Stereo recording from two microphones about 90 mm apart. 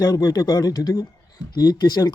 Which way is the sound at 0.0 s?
45° left (ahead or behind).